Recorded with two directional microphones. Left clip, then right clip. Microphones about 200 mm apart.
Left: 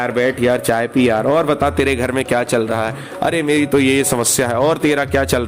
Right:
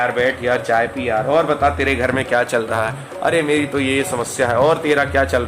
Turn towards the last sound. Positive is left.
turn(degrees=45)  # may be behind; listen again after turning